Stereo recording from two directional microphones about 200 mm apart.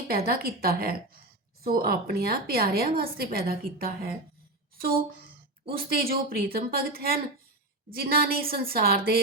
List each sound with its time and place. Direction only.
0.1 s a woman's voice: 50° right (ahead or behind)
5.7 s a woman's voice: 50° right (ahead or behind)